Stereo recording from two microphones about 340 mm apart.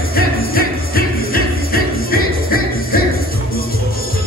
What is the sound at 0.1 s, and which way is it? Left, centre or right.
Music, left.